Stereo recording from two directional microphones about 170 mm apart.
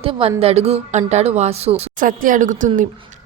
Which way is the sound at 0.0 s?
35° right (ahead or behind).